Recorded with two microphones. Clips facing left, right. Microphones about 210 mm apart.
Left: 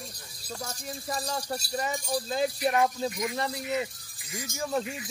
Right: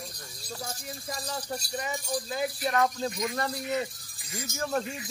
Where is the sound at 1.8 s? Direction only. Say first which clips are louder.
Left 3 dB; 35° left (ahead or behind).